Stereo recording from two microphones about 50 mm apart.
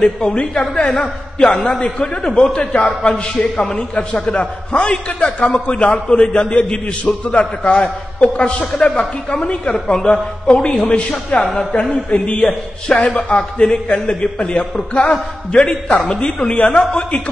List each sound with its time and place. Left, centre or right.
0.0 s a woman's voice: centre